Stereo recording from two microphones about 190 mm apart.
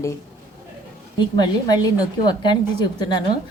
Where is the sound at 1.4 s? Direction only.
20° left (ahead or behind).